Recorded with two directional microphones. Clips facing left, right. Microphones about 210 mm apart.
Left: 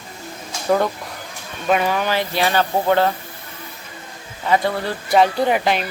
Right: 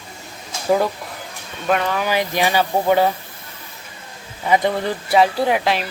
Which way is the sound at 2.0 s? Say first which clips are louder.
Right 1 dB; 15° right (ahead or behind).